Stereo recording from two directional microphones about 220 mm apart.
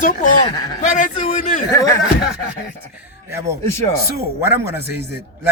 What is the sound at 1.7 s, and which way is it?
Speech, 15° left (ahead or behind).